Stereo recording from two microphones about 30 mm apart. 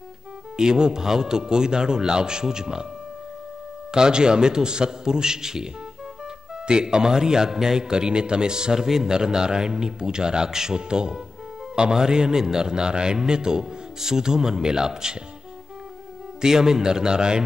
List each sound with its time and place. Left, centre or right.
0.6 s a man's voice: right
3.9 s a man's voice: right
6.7 s a man's voice: right
8.8 s a man's voice: centre
16.3 s a man's voice: centre